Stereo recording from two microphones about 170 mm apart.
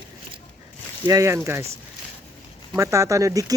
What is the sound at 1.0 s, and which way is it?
Speech, 20° right (ahead or behind).